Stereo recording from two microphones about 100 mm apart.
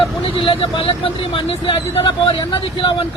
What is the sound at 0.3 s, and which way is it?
Speech, 60° left (ahead or behind).